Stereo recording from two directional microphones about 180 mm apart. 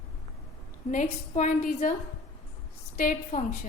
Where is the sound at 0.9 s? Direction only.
45° left (ahead or behind).